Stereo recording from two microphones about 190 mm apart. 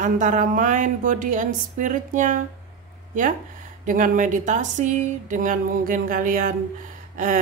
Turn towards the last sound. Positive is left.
turn(degrees=-45)  # may be behind; listen again after turning